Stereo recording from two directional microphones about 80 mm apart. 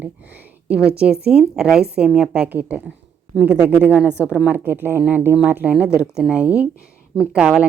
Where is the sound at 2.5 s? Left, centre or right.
Right.